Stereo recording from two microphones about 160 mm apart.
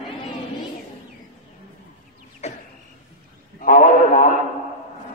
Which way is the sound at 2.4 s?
45° left (ahead or behind).